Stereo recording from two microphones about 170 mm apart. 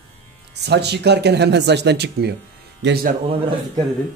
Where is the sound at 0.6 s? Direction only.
80° right.